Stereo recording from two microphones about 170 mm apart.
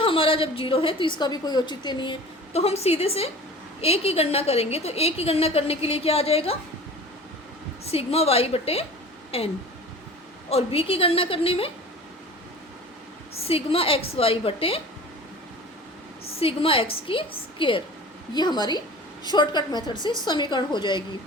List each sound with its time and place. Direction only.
0.0 s a woman's voice: 30° left (ahead or behind)
2.5 s a woman's voice: 40° left (ahead or behind)
7.9 s a woman's voice: 35° left (ahead or behind)
10.5 s a woman's voice: 35° left (ahead or behind)
13.3 s a woman's voice: 35° left (ahead or behind)
16.4 s a woman's voice: 35° left (ahead or behind)